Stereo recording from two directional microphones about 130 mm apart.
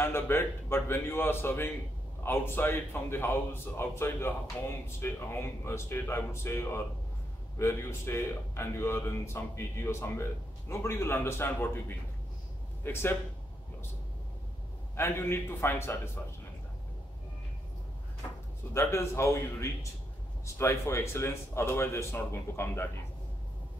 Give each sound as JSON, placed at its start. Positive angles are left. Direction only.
{"t": 0.0, "sound": "a man's voice", "side_deg": 20}
{"t": 12.9, "sound": "a man's voice", "side_deg": 15}
{"t": 15.0, "sound": "speech", "side_deg": 20}
{"t": 18.7, "sound": "speech", "side_deg": 20}